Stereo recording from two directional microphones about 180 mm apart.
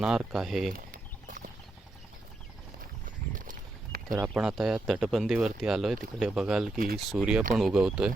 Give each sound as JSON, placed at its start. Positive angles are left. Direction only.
{"t": 0.0, "sound": "speech", "side_deg": -5}
{"t": 0.7, "sound": "a sound", "side_deg": -50}
{"t": 3.3, "sound": "a sound", "side_deg": -50}
{"t": 4.2, "sound": "speech", "side_deg": -5}
{"t": 6.7, "sound": "speech", "side_deg": -55}
{"t": 7.0, "sound": "speech", "side_deg": -5}